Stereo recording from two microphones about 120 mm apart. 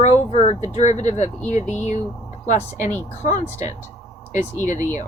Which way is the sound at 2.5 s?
80° left.